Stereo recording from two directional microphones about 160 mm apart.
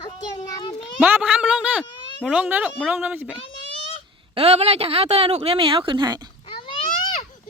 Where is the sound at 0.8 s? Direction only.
5° right (ahead or behind).